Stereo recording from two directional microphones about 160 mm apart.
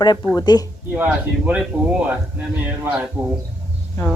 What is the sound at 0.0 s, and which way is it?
Speech, 25° left (ahead or behind).